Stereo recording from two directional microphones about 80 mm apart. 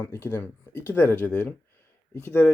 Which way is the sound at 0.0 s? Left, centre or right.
Left.